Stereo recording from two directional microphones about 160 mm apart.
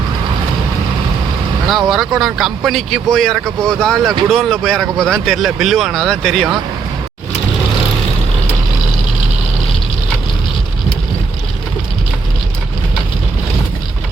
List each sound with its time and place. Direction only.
1.9 s speech: centre (ahead or behind)
3.9 s speech: 25° right (ahead or behind)
4.3 s speech: 5° left (ahead or behind)